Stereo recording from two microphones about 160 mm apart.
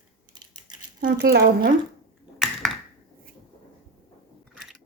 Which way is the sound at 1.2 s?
80° right.